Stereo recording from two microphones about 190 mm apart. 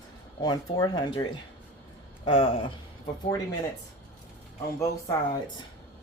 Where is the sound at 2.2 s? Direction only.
30° left (ahead or behind).